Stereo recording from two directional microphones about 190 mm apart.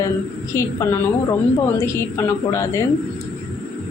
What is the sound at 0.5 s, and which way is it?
Speech, 15° left (ahead or behind).